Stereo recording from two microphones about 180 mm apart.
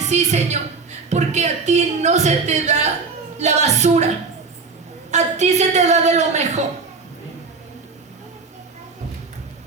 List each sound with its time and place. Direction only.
0.0 s a woman's voice: 40° right (ahead or behind)
5.1 s a woman's voice: 40° right (ahead or behind)